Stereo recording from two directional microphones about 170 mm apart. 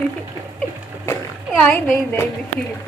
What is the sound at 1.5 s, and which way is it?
Speech, 5° left (ahead or behind).